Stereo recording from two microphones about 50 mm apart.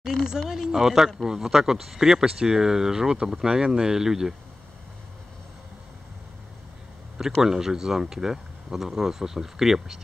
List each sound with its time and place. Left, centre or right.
0.0 s speech: centre
7.4 s speech: centre